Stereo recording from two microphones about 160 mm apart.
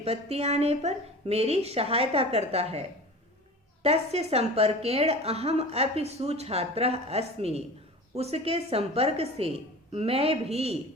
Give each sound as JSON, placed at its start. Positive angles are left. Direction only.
{"t": 0.0, "sound": "a woman's voice", "side_deg": -40}
{"t": 3.8, "sound": "a woman's voice", "side_deg": -40}